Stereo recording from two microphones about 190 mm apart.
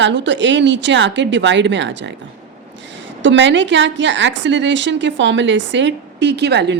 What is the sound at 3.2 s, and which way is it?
A woman's voice, 75° right (ahead or behind).